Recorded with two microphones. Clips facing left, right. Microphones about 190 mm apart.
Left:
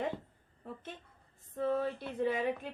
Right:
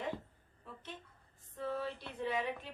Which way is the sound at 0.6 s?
50° left (ahead or behind).